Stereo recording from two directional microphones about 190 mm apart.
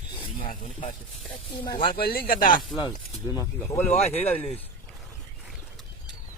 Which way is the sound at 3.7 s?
35° left (ahead or behind).